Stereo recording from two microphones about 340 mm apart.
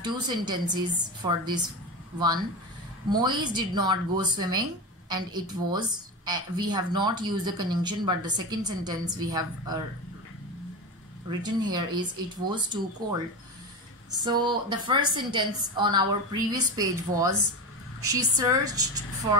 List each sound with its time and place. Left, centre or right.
0.0 s a woman's voice: centre
11.7 s a woman's voice: centre